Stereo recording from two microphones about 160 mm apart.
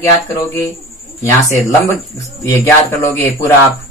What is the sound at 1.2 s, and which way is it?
Speech, 20° left (ahead or behind).